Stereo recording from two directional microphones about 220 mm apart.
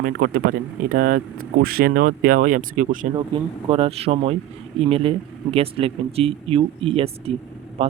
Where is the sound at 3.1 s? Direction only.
25° right (ahead or behind).